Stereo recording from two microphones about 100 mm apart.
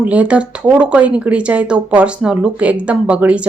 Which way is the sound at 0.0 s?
15° right (ahead or behind).